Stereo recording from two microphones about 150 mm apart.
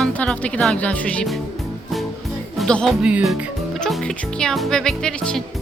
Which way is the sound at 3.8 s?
5° left (ahead or behind).